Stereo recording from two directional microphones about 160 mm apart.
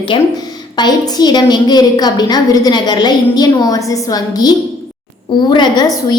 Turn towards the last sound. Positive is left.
turn(degrees=25)  # may be behind; listen again after turning